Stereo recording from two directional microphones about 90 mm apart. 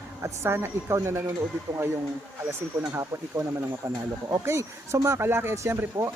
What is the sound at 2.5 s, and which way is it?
Speech, 30° right (ahead or behind).